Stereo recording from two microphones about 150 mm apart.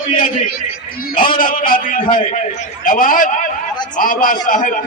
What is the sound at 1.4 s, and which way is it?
A man's voice, 70° left (ahead or behind).